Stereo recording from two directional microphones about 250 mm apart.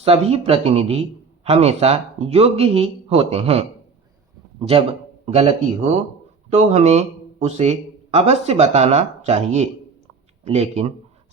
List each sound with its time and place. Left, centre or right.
0.0 s a man's voice: right